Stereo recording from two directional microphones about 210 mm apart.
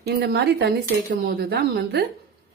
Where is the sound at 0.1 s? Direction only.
50° right (ahead or behind).